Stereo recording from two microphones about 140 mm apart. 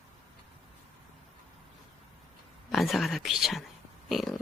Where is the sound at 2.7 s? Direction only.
Centre (ahead or behind).